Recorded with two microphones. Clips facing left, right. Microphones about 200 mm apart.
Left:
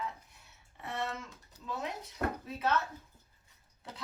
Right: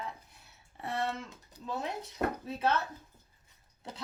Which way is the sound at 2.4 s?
30° right (ahead or behind).